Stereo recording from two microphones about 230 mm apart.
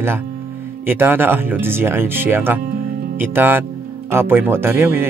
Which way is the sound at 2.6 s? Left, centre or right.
Right.